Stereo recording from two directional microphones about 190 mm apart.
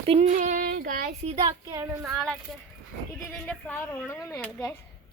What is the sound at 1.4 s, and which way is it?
Speech, 20° right (ahead or behind).